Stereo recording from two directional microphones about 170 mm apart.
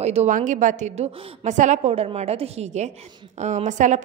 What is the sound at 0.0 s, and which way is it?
A woman's voice, 40° right (ahead or behind).